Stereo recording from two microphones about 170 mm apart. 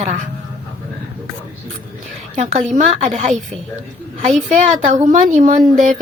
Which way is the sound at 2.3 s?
45° right (ahead or behind).